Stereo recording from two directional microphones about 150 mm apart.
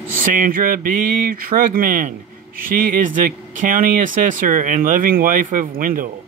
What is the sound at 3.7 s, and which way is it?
Speech, 65° right (ahead or behind).